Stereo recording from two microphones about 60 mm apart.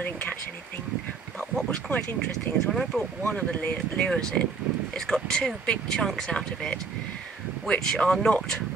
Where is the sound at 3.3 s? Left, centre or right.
Left.